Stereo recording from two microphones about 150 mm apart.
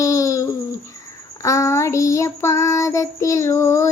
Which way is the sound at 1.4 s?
20° left (ahead or behind).